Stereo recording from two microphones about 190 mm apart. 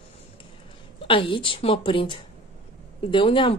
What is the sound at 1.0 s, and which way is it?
A woman's voice, 25° left (ahead or behind).